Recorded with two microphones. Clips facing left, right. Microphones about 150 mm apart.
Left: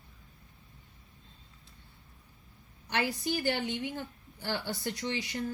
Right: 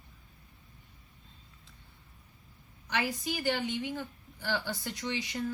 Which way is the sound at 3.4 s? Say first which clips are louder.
Right 4 dB; 55° left (ahead or behind).